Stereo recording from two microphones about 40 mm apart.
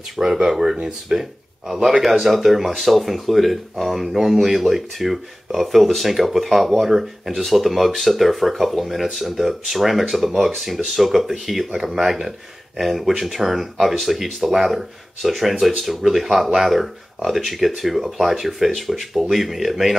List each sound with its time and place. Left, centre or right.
0.2 s speech: centre
1.1 s speech: right
1.7 s speech: centre